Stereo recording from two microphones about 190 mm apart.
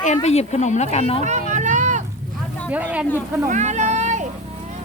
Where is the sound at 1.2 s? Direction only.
40° right (ahead or behind).